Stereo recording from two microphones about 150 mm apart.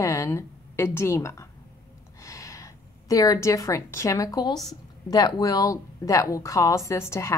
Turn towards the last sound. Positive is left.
turn(degrees=20)  # may be behind; listen again after turning